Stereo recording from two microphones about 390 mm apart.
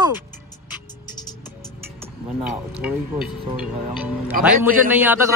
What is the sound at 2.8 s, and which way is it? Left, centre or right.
A man's voice, centre.